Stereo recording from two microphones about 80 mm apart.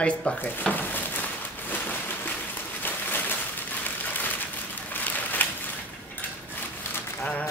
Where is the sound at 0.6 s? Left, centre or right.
Left.